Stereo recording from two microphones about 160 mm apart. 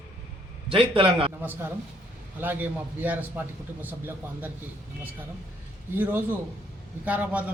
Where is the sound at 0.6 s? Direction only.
35° right (ahead or behind).